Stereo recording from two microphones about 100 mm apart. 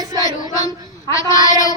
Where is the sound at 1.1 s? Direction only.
35° left (ahead or behind).